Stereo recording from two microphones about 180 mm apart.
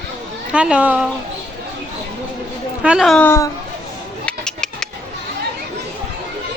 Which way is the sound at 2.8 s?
5° right (ahead or behind).